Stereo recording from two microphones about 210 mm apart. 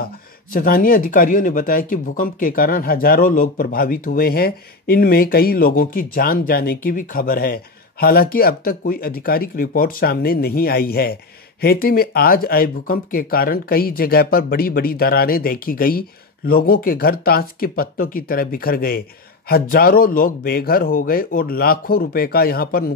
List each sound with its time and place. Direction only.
0.5 s speech: 45° left (ahead or behind)